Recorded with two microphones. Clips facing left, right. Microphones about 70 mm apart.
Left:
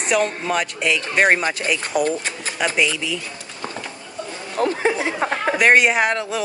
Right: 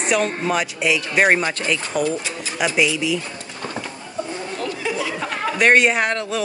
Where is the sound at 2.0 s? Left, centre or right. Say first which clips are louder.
Left 1 dB; left.